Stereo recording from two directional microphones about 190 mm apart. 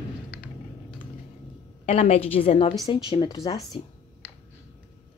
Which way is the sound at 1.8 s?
35° left (ahead or behind).